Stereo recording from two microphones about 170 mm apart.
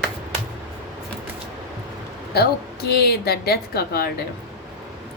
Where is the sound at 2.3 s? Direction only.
70° left (ahead or behind).